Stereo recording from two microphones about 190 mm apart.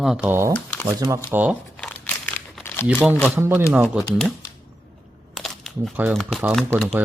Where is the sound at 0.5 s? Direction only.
10° left (ahead or behind).